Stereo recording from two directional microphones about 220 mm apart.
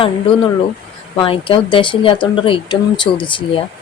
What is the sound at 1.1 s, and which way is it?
Speech, 25° left (ahead or behind).